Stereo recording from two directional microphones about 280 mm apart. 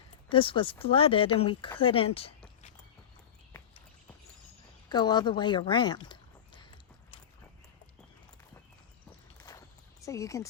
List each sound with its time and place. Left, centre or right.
0.3 s speech: centre
4.9 s speech: centre
9.5 s a sound: centre
10.0 s speech: centre